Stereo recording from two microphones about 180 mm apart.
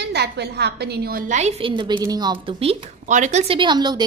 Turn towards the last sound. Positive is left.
turn(degrees=-25)  # may be behind; listen again after turning